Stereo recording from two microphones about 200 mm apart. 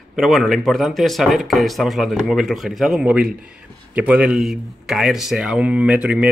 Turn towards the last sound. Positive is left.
turn(degrees=-5)  # may be behind; listen again after turning